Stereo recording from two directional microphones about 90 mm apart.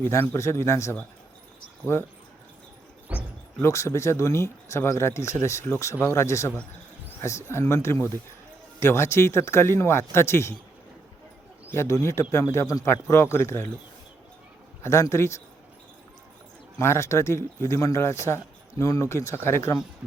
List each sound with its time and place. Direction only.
0.0 s speech: 30° left (ahead or behind)
3.1 s a sound: 15° right (ahead or behind)
3.6 s speech: 35° left (ahead or behind)
11.7 s speech: 30° left (ahead or behind)
14.8 s speech: 35° left (ahead or behind)
16.7 s speech: 30° left (ahead or behind)